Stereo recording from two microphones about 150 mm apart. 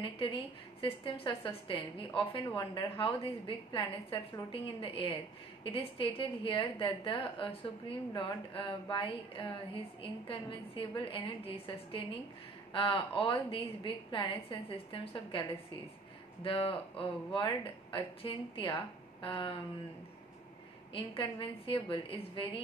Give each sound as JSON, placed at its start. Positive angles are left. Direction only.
{"t": 0.0, "sound": "a woman's voice", "side_deg": 35}
{"t": 16.4, "sound": "a woman's voice", "side_deg": 35}
{"t": 20.9, "sound": "a woman's voice", "side_deg": 35}